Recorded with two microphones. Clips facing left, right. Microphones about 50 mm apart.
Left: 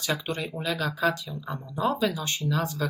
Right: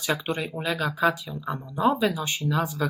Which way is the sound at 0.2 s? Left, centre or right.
Centre.